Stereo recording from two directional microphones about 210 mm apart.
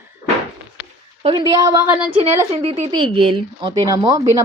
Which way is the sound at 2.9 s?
25° right (ahead or behind).